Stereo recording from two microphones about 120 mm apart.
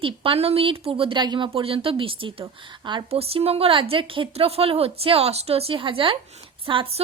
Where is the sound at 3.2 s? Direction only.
55° right (ahead or behind).